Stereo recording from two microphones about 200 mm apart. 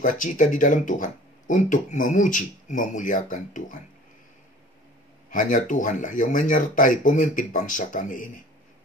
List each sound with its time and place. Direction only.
0.0 s speech: 40° left (ahead or behind)
5.3 s speech: 40° left (ahead or behind)